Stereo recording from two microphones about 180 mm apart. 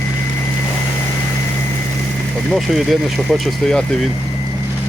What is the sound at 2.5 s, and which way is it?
Speech, centre (ahead or behind).